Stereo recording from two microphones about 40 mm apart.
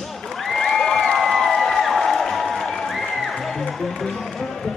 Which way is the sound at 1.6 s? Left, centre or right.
Centre.